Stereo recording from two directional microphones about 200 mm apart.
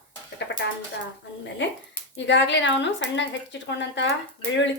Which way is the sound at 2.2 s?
65° left (ahead or behind).